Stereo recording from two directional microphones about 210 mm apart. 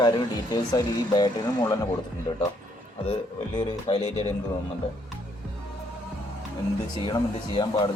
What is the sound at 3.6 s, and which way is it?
Speech, 30° left (ahead or behind).